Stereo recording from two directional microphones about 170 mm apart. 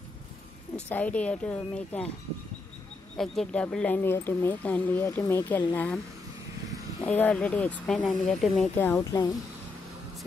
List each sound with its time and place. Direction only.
0.8 s speech: 10° left (ahead or behind)
3.2 s speech: 5° left (ahead or behind)
7.0 s speech: 10° left (ahead or behind)